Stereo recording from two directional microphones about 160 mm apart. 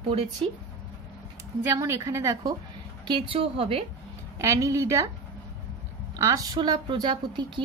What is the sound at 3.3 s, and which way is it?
Speech, 35° right (ahead or behind).